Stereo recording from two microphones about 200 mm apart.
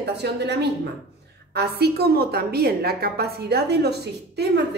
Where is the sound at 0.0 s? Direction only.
55° right (ahead or behind).